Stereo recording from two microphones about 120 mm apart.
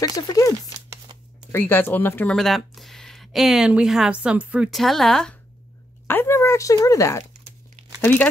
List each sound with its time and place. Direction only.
0.0 s speech: 30° left (ahead or behind)
1.5 s speech: 15° left (ahead or behind)
2.3 s speech: centre (ahead or behind)
4.6 s speech: centre (ahead or behind)
6.0 s speech: 20° left (ahead or behind)
8.0 s speech: 15° left (ahead or behind)